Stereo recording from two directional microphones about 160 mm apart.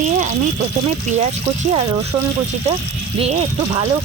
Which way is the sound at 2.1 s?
30° right (ahead or behind).